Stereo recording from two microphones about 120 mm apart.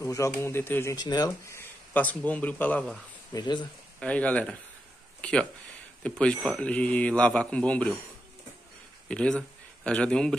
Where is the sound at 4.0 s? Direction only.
10° left (ahead or behind).